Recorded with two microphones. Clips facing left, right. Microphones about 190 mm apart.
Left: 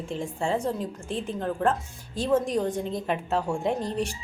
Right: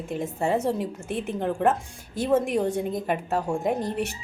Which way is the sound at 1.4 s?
20° right (ahead or behind).